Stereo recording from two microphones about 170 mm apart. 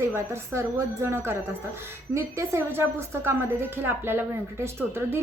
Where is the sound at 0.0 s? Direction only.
15° right (ahead or behind).